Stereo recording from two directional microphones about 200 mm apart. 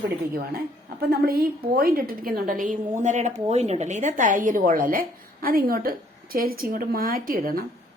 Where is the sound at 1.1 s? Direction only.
50° right (ahead or behind).